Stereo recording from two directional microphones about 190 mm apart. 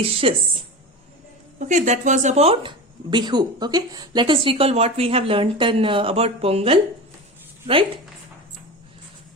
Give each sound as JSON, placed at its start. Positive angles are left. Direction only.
{"t": 0.0, "sound": "speech", "side_deg": -30}
{"t": 1.5, "sound": "speech", "side_deg": -40}